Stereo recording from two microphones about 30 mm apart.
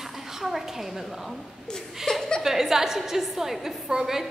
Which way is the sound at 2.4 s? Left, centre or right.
Centre.